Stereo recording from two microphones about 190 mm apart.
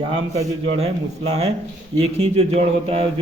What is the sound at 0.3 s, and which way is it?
Speech, 30° right (ahead or behind).